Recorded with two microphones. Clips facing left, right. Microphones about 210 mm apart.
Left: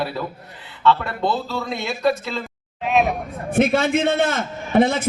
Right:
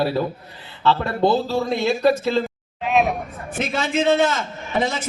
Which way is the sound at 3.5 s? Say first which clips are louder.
Left 5 dB; 55° left (ahead or behind).